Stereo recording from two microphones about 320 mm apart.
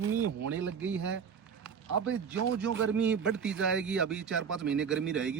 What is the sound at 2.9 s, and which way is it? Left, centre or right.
A man's voice, centre.